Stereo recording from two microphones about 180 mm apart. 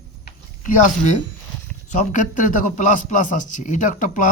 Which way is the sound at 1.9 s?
45° left (ahead or behind).